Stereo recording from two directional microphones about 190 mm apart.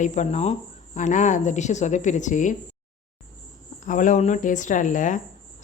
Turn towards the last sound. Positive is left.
turn(degrees=40)  # may be behind; listen again after turning